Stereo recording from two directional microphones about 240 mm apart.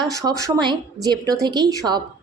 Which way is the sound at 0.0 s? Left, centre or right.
Centre.